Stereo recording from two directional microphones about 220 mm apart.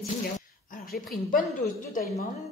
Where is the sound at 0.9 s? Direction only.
40° left (ahead or behind).